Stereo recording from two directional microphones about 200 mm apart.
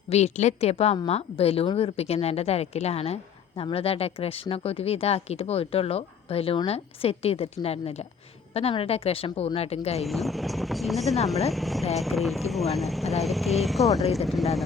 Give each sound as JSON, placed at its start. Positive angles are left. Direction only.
{"t": 0.1, "sound": "a woman's voice", "side_deg": 35}
{"t": 10.1, "sound": "speech", "side_deg": 0}